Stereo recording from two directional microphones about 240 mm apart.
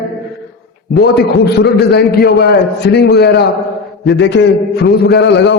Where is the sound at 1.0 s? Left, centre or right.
Left.